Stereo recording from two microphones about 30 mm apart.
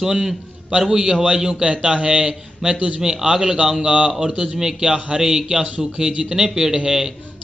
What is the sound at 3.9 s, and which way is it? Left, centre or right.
Speech, right.